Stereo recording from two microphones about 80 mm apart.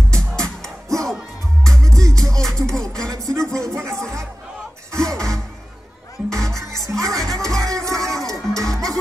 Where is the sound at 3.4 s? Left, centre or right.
Centre.